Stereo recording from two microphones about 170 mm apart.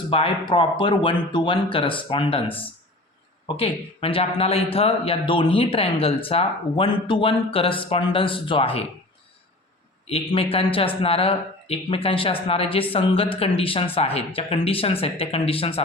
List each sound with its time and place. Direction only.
0.1 s a man's voice: 35° left (ahead or behind)
3.6 s a man's voice: 35° left (ahead or behind)
10.1 s a man's voice: 35° left (ahead or behind)